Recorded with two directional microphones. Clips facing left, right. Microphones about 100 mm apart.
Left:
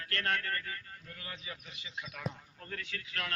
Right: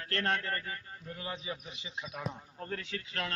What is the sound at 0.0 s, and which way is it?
A man's voice, 30° right (ahead or behind).